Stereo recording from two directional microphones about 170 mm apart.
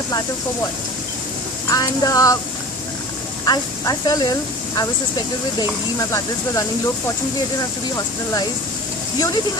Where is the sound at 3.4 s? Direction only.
25° left (ahead or behind).